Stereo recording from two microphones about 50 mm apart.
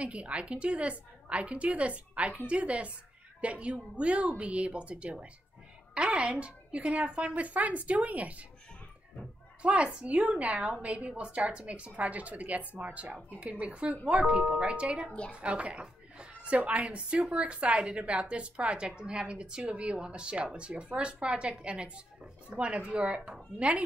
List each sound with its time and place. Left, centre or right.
0.0 s speech: right
9.6 s a woman's voice: right
15.0 s a woman's voice: left
15.3 s speech: right